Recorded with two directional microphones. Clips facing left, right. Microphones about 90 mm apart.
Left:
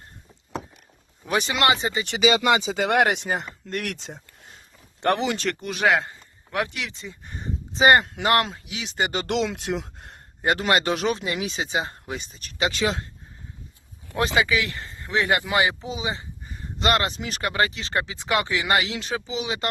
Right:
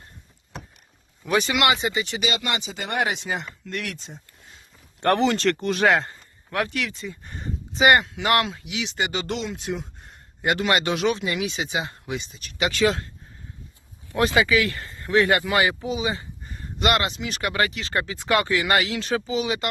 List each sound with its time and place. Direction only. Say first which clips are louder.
1.2 s speech: right 1 dB; 25° left (ahead or behind)
2.9 s speech: left 4 dB; 80° left
3.2 s speech: left 2 dB; 40° left (ahead or behind)
3.8 s speech: left 2 dB; 85° left
5.0 s speech: right 3 dB; 15° left (ahead or behind)
6.5 s speech: right 2 dB; 20° left (ahead or behind)
7.7 s speech: left 1 dB; 30° left (ahead or behind)
9.2 s speech: left 4 dB; 90° left
10.4 s speech: left 1 dB; 35° left (ahead or behind)
14.2 s speech: right 2 dB; 25° left (ahead or behind)
16.7 s speech: even; 35° left (ahead or behind)
17.5 s speech: left 1 dB; 25° left (ahead or behind)